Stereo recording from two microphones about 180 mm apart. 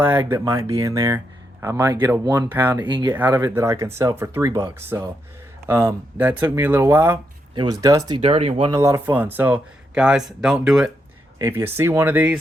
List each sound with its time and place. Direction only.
0.0 s speech: 10° right (ahead or behind)
2.8 s speech: 25° right (ahead or behind)
8.7 s speech: 15° right (ahead or behind)